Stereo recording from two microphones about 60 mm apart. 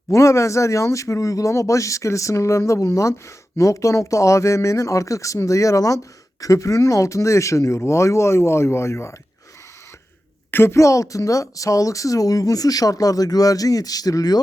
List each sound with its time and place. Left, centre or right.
0.1 s speech: left
10.5 s a woman's voice: left
10.8 s speech: left